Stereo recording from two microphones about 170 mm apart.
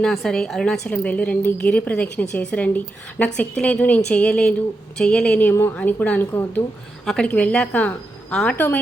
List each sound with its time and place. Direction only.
0.0 s a woman's voice: centre (ahead or behind)